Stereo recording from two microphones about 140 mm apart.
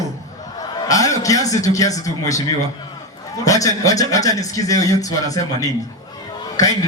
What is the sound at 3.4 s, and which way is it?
A man's voice, 25° left (ahead or behind).